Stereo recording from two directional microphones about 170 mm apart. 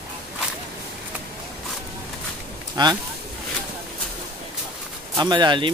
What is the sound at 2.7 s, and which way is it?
Speech, 25° right (ahead or behind).